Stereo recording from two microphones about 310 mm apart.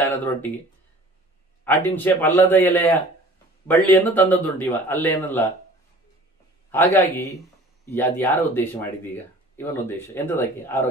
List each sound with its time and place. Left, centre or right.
0.0 s speech: centre
1.6 s a man's voice: centre
6.7 s speech: centre